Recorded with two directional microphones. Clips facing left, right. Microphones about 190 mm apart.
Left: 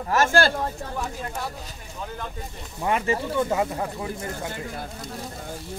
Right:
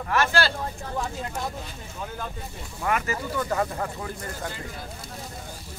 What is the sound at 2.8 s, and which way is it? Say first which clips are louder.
Speech: left 3 dB; 25° left (ahead or behind).